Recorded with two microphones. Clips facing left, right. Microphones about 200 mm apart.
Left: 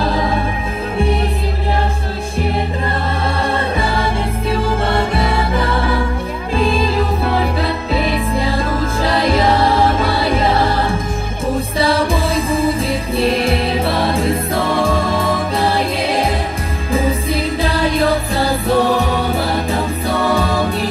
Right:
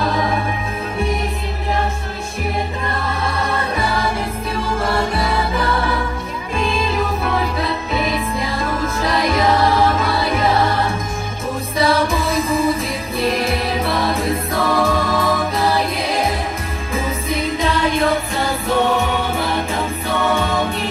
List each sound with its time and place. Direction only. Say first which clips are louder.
0.0 s music: left 2 dB; 30° left (ahead or behind)
3.4 s music: left 2 dB; 30° left (ahead or behind)